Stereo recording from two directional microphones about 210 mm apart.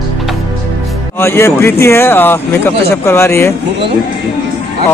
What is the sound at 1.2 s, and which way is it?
Speech, 10° left (ahead or behind).